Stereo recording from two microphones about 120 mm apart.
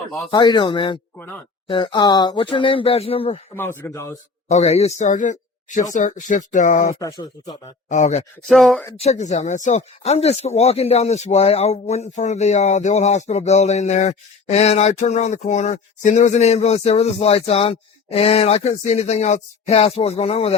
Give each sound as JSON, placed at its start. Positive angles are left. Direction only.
{"t": 0.3, "sound": "speech", "side_deg": 35}
{"t": 3.5, "sound": "speech", "side_deg": 20}
{"t": 4.4, "sound": "speech", "side_deg": 70}
{"t": 7.0, "sound": "speech", "side_deg": 35}
{"t": 7.9, "sound": "speech", "side_deg": 90}
{"t": 8.4, "sound": "speech", "side_deg": 0}
{"t": 9.0, "sound": "speech", "side_deg": 70}